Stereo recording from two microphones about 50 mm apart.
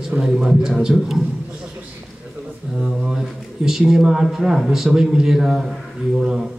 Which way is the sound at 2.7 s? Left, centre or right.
Centre.